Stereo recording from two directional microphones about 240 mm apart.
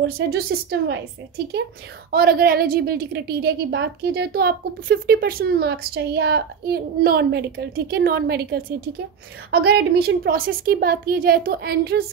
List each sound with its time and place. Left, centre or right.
0.0 s a woman's voice: right
2.0 s a woman's voice: right